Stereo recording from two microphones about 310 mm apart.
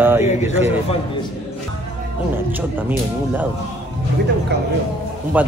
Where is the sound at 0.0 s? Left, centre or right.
Centre.